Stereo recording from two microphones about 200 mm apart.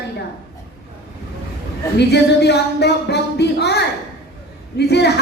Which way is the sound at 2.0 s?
55° left (ahead or behind).